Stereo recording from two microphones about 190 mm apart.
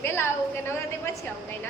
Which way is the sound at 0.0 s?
15° left (ahead or behind).